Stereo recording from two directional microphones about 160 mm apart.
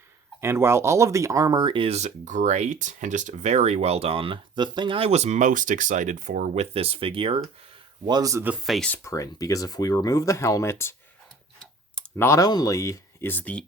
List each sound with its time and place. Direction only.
0.4 s speech: 15° right (ahead or behind); by 7.4 s 35° right (ahead or behind)
8.0 s speech: 25° right (ahead or behind)
8.5 s speech: centre (ahead or behind)
8.9 s speech: 20° left (ahead or behind)
12.1 s speech: 15° left (ahead or behind)